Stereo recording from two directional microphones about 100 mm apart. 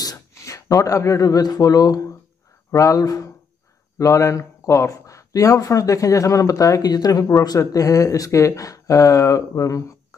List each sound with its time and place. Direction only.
0.0 s a man's voice: 35° left (ahead or behind)